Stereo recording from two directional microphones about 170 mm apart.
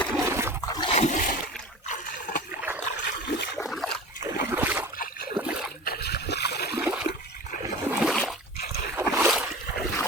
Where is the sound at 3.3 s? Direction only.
85° left.